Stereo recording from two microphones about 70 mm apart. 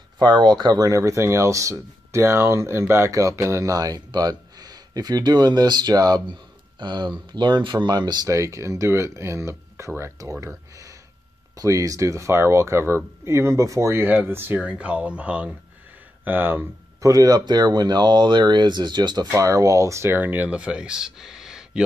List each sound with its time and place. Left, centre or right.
0.5 s speech: right
3.1 s speech: right
6.8 s speech: right
8.3 s speech: right
10.7 s a sound: right
11.5 s speech: right
14.0 s speech: right
14.6 s speech: centre
16.3 s speech: right
17.0 s speech: right
19.3 s speech: right
20.1 s speech: right
20.4 s speech: centre